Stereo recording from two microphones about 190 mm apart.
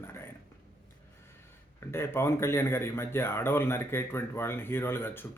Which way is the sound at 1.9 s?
15° left (ahead or behind).